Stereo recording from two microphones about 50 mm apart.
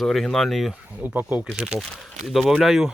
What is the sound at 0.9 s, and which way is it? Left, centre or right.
Speech, right.